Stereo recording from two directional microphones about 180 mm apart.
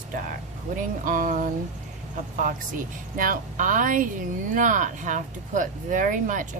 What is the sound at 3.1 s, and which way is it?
Speech, 50° right (ahead or behind).